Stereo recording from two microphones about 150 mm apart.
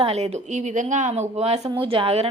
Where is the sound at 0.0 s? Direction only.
45° right (ahead or behind).